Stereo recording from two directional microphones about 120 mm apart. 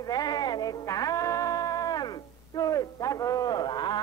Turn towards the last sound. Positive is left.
turn(degrees=35)  # may be behind; listen again after turning